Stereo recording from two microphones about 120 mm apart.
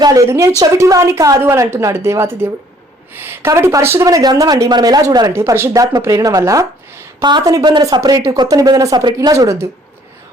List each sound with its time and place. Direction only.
0.0 s speech: 30° right (ahead or behind)
5.3 s speech: 20° right (ahead or behind)